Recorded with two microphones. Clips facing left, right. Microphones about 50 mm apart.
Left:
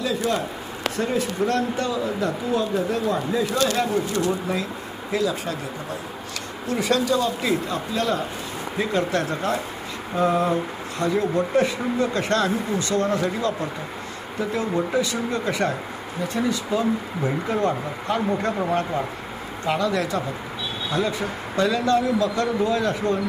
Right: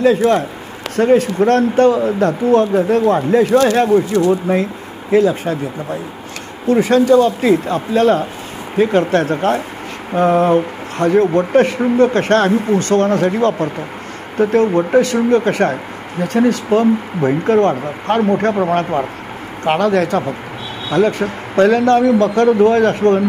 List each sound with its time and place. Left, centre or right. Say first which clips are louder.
0.0 s speech: right 11 dB; right
6.7 s speech: right 11 dB; right